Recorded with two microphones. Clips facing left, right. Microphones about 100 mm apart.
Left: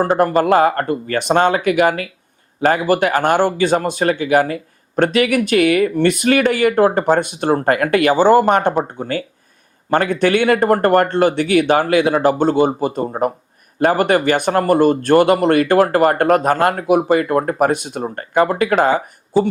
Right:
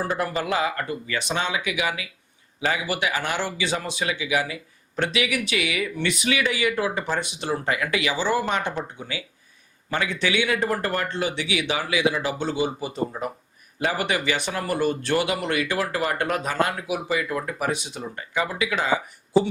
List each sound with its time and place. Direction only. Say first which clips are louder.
0.1 s speech: left 12 dB; 45° left (ahead or behind)